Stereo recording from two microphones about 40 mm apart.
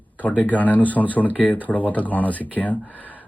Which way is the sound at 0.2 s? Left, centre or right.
Left.